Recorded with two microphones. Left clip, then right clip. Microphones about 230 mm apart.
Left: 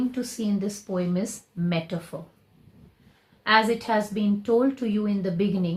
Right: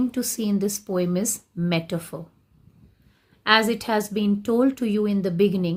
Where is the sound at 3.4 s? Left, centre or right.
Right.